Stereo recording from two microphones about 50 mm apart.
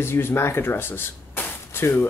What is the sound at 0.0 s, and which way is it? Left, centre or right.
Speech, left.